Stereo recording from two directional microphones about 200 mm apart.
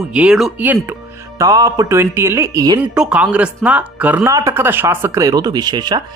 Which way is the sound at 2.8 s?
5° right (ahead or behind).